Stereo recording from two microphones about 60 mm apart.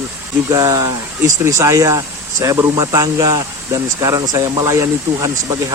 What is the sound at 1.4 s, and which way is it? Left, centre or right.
Speech, right.